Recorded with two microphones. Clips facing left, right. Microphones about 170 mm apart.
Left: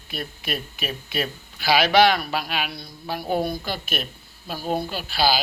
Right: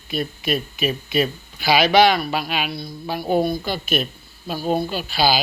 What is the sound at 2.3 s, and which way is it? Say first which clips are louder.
Speech: right 3 dB; centre (ahead or behind).